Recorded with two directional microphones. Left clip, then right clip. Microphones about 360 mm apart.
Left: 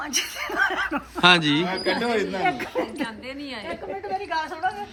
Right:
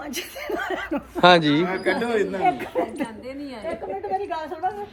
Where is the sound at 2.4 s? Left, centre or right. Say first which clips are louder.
Right 2 dB; centre.